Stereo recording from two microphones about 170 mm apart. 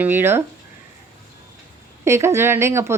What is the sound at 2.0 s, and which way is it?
Speech, 15° right (ahead or behind).